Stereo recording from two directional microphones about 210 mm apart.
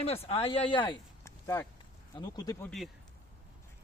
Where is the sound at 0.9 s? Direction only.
15° left (ahead or behind).